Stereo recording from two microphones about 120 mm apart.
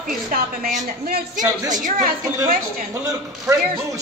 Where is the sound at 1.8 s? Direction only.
90° right.